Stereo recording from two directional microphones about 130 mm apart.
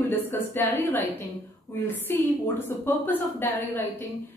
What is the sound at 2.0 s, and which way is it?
A woman's voice, 15° left (ahead or behind).